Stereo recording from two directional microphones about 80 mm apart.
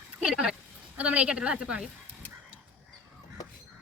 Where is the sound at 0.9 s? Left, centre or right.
Centre.